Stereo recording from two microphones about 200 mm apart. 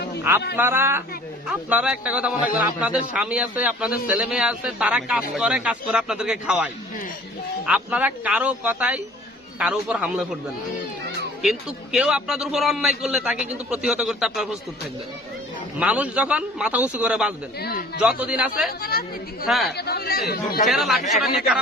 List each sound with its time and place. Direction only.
0.5 s a man's voice: 10° right (ahead or behind)
11.4 s a man's voice: 5° right (ahead or behind)
15.8 s a man's voice: 5° right (ahead or behind)
17.6 s speech: 50° left (ahead or behind)
18.2 s a man's voice: 5° right (ahead or behind)
18.8 s speech: 50° left (ahead or behind)
19.5 s a man's voice: centre (ahead or behind)
19.7 s speech: 50° left (ahead or behind)
20.7 s a man's voice: centre (ahead or behind)